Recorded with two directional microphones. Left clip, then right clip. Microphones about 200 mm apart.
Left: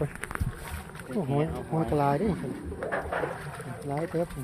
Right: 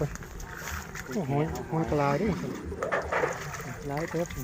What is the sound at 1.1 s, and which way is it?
Speech, 20° left (ahead or behind).